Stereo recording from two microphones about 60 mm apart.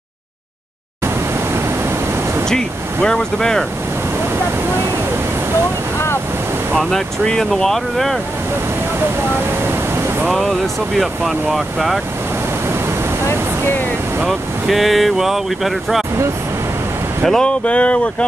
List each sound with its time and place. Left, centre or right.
2.4 s speech: centre
6.8 s speech: centre
11.0 s speech: centre
14.2 s speech: centre
17.2 s speech: centre